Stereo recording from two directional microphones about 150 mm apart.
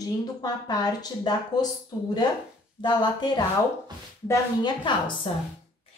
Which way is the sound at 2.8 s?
30° left (ahead or behind).